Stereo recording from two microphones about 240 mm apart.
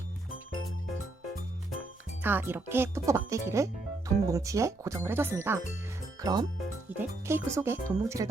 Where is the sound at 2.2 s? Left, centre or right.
Centre.